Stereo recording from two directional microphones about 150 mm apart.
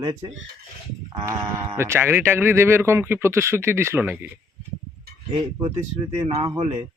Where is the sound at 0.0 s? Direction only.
25° right (ahead or behind).